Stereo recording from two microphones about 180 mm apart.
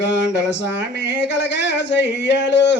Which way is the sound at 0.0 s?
80° left.